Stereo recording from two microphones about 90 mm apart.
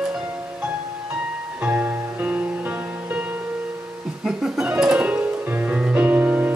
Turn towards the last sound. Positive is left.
turn(degrees=-20)  # may be behind; listen again after turning